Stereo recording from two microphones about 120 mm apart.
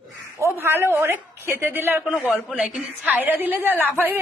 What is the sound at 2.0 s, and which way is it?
A man's voice, 5° right (ahead or behind).